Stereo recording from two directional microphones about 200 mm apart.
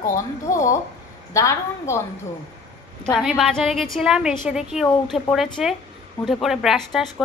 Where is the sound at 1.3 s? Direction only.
15° left (ahead or behind).